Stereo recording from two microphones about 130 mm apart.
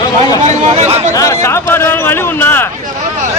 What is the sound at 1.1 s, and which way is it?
A man's voice, 25° left (ahead or behind).